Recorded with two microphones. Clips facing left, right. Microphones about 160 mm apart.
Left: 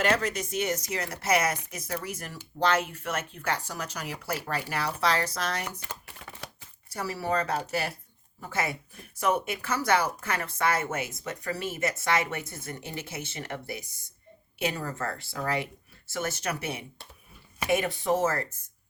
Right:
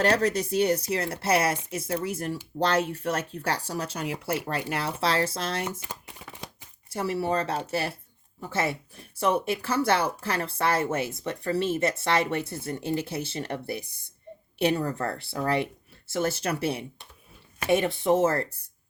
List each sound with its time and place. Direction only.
0.0 s speech: 35° right (ahead or behind)
5.8 s chopping: 15° right (ahead or behind)
6.9 s speech: 25° right (ahead or behind)
14.8 s speech: 30° right (ahead or behind)